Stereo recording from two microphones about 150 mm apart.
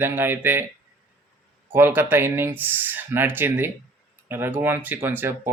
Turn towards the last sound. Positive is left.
turn(degrees=-15)  # may be behind; listen again after turning